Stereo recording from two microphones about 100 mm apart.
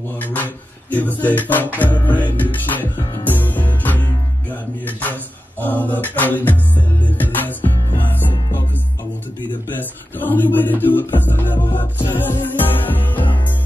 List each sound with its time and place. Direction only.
0.2 s music: 15° left (ahead or behind)
9.8 s music: 20° left (ahead or behind)